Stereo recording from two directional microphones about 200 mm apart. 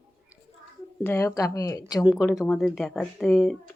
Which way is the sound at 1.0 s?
15° left (ahead or behind).